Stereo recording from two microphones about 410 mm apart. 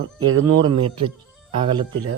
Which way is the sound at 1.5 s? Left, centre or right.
Centre.